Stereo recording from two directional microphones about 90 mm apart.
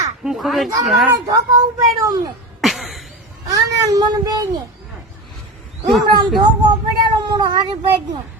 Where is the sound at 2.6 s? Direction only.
Centre (ahead or behind).